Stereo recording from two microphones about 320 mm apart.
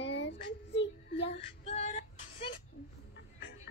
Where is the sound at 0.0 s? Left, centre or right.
Left.